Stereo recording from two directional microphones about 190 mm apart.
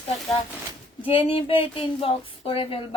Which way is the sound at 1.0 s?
30° left (ahead or behind).